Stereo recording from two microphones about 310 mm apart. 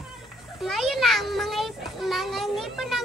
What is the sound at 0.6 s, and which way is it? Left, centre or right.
A child's voice, centre.